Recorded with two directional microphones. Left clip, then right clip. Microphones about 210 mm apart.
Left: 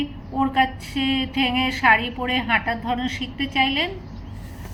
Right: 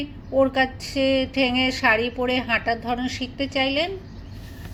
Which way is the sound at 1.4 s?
25° right (ahead or behind).